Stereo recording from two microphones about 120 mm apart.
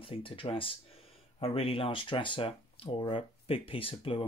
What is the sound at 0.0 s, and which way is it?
Speech, 50° left (ahead or behind).